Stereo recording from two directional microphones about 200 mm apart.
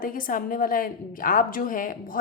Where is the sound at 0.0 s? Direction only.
45° left (ahead or behind).